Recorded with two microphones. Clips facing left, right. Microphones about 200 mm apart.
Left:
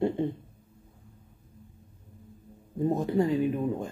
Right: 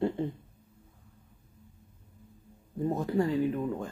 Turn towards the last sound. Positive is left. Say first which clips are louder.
# left 2 dB
turn(degrees=20)  # may be behind; listen again after turning